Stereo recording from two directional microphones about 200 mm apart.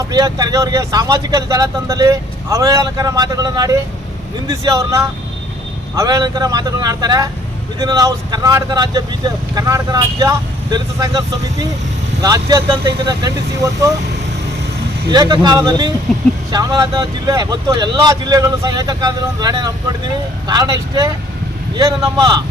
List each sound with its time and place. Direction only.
0.1 s speech: 20° right (ahead or behind)
15.1 s speech: 20° right (ahead or behind)
16.1 s speech: centre (ahead or behind)
16.5 s speech: 20° right (ahead or behind)